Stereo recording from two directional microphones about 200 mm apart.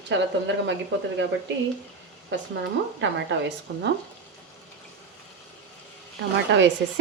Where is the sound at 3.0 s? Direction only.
65° right (ahead or behind).